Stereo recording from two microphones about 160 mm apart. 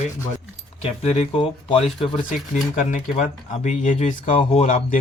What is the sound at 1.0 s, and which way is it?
Speech, 45° left (ahead or behind).